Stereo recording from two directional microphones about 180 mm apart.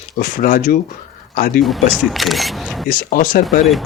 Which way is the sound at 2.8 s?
50° left (ahead or behind).